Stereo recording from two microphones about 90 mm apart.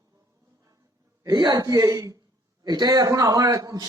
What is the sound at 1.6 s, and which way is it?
A woman's voice, 40° right (ahead or behind).